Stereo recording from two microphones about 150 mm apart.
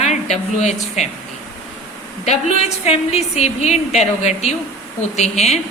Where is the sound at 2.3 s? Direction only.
45° left (ahead or behind).